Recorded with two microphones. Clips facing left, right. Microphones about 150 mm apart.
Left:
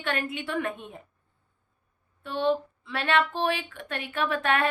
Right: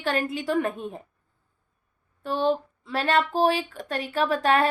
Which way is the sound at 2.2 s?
40° right (ahead or behind).